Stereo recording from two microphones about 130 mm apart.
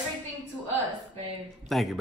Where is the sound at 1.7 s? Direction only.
Centre (ahead or behind).